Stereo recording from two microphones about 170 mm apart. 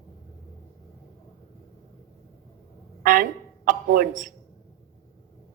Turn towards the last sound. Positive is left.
turn(degrees=-55)  # may be behind; listen again after turning